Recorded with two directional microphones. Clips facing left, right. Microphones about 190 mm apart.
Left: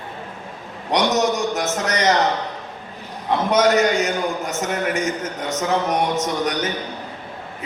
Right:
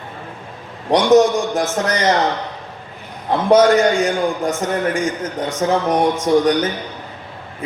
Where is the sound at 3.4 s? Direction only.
30° right (ahead or behind).